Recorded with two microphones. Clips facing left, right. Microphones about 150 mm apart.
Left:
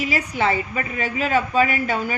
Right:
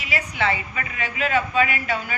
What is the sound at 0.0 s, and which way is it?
A woman's voice, 40° left (ahead or behind).